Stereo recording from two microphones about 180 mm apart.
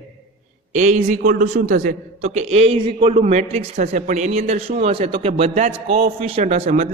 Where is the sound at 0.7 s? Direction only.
45° right (ahead or behind).